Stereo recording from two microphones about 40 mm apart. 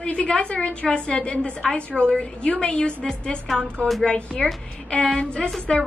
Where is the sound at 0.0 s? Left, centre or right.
Left.